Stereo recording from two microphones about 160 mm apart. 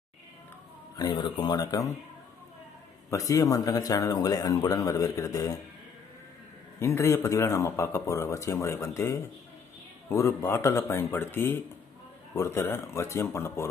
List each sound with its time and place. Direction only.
0.9 s speech: 25° left (ahead or behind)
3.1 s speech: 20° left (ahead or behind)
6.7 s speech: 15° left (ahead or behind)